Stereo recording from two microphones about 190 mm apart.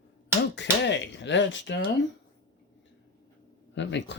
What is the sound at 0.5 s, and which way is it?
Speech, 65° left (ahead or behind).